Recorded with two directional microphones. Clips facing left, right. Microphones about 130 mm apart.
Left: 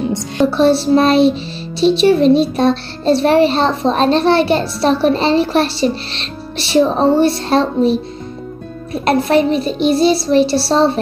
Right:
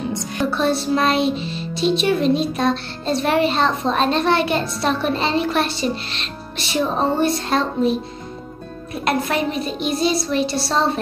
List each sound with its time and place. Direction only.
0.4 s speech: 30° left (ahead or behind)
1.8 s music: 30° left (ahead or behind)
9.0 s music: 30° left (ahead or behind)